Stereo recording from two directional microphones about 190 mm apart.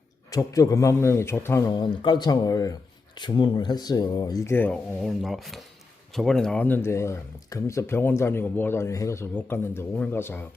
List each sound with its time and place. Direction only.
0.3 s a man's voice: 20° left (ahead or behind)